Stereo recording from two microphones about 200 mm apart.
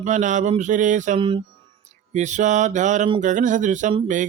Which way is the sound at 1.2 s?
25° right (ahead or behind).